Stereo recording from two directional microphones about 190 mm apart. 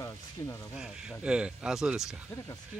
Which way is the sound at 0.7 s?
5° right (ahead or behind).